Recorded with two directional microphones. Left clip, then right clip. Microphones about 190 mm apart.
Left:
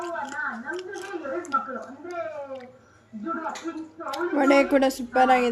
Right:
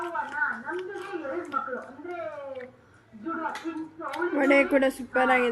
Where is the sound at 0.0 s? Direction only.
25° left (ahead or behind).